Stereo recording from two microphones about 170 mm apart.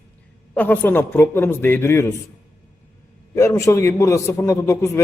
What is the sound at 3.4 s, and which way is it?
A man's voice, 15° left (ahead or behind).